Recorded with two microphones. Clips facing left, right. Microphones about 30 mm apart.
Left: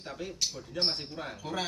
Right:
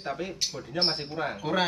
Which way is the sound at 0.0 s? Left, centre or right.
Right.